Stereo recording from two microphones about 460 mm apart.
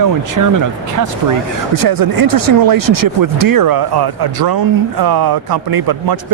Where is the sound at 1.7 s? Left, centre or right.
Right.